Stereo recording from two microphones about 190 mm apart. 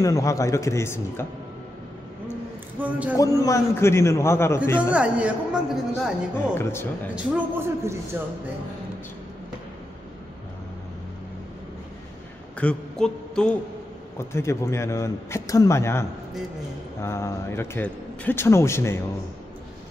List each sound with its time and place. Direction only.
0.0 s speech: 15° left (ahead or behind)
2.8 s a man's voice: 5° right (ahead or behind)
3.2 s speech: 20° left (ahead or behind)
4.7 s a man's voice: 5° right (ahead or behind)
6.3 s speech: 10° left (ahead or behind)
7.2 s a man's voice: 15° right (ahead or behind)
12.5 s a man's voice: 5° left (ahead or behind)